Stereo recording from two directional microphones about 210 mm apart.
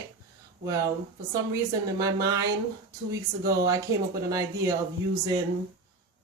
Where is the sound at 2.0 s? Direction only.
15° right (ahead or behind).